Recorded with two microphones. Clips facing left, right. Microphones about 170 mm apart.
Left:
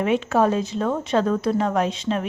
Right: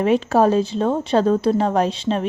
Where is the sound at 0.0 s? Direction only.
35° right (ahead or behind).